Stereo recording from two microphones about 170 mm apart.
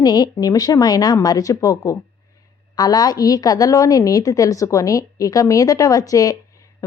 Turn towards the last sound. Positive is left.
turn(degrees=20)  # may be behind; listen again after turning